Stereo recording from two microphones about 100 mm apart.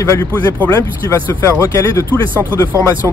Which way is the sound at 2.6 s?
30° left (ahead or behind).